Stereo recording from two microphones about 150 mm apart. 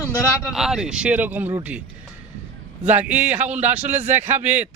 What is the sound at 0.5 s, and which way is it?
Speech, 5° right (ahead or behind).